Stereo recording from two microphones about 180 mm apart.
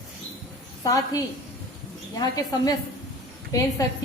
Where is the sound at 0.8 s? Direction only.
20° left (ahead or behind).